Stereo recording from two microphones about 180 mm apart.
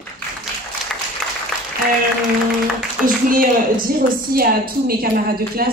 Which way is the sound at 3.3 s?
50° right (ahead or behind).